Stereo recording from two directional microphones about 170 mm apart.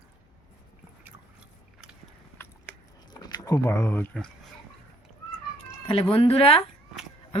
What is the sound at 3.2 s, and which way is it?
Speech, 20° left (ahead or behind).